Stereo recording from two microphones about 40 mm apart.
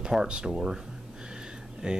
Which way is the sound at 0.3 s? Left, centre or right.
Right.